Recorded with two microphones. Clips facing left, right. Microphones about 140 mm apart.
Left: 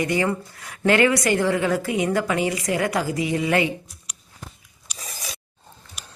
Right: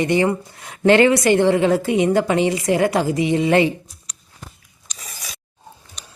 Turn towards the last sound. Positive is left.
turn(degrees=5)  # may be behind; listen again after turning